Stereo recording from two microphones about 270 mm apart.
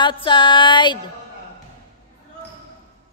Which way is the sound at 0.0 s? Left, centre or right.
Centre.